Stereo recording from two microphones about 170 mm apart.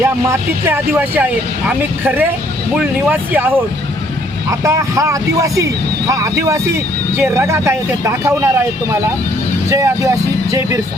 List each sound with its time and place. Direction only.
0.0 s speech: 15° right (ahead or behind)
4.6 s speech: 15° right (ahead or behind)
9.6 s speech: 15° right (ahead or behind)